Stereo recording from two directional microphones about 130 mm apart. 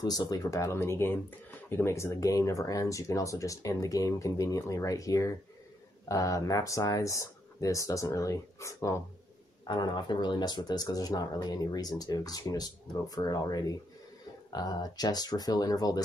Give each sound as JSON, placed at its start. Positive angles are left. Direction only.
{"t": 0.0, "sound": "speech", "side_deg": 30}
{"t": 9.7, "sound": "speech", "side_deg": 35}